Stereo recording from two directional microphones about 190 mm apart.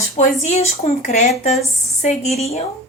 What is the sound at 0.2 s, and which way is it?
A woman's voice, 35° left (ahead or behind).